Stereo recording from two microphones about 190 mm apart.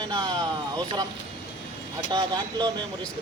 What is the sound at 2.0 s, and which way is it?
Speech, 20° right (ahead or behind).